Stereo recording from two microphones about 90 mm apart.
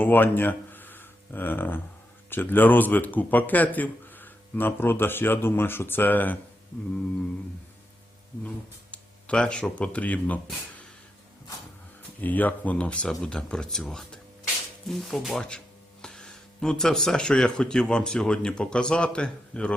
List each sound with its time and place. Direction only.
0.0 s speech: 20° left (ahead or behind)
8.4 s speech: 15° left (ahead or behind)
12.2 s speech: 20° left (ahead or behind)